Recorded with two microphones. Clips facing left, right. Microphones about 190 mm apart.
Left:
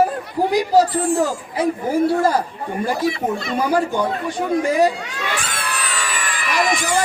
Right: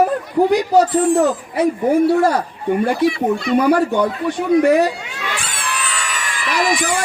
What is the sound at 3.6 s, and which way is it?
A woman's voice, 65° right (ahead or behind).